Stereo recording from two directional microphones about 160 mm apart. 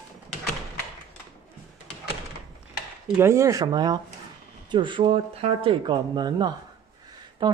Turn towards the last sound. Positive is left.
turn(degrees=-30)  # may be behind; listen again after turning